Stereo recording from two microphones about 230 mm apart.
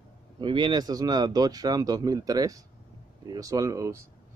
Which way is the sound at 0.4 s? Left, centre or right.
Right.